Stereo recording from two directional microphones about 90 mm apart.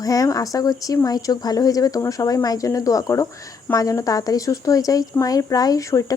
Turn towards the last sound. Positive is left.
turn(degrees=35)  # may be behind; listen again after turning